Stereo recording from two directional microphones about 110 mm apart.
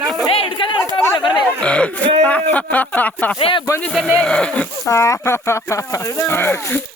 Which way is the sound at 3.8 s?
5° left (ahead or behind).